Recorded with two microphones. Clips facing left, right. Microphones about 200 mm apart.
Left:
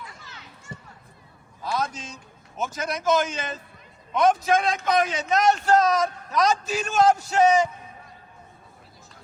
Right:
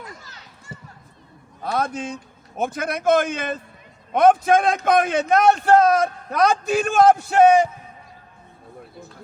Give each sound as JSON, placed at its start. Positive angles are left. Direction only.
{"t": 0.0, "sound": "children playing", "side_deg": -40}
{"t": 1.6, "sound": "a man's voice", "side_deg": -55}